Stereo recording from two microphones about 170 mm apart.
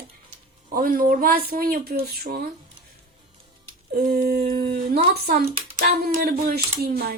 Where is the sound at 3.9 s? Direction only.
55° right (ahead or behind).